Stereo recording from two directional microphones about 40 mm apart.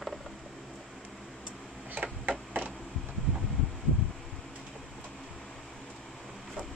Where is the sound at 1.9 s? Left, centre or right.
Right.